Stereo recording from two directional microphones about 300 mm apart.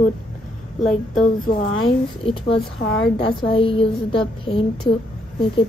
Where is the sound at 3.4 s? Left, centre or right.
Centre.